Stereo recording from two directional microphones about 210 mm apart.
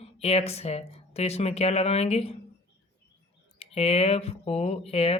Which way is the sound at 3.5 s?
30° left (ahead or behind).